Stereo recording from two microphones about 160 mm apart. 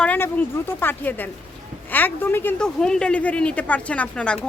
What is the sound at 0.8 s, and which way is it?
Speech, 10° left (ahead or behind).